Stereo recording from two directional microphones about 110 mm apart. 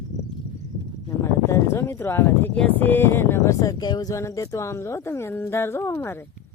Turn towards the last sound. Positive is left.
turn(degrees=20)  # may be behind; listen again after turning